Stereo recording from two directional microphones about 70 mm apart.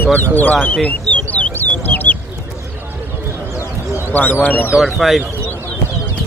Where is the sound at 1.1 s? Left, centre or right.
Left.